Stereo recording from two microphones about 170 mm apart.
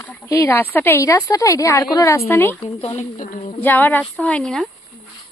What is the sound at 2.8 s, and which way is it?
Speech, 35° left (ahead or behind).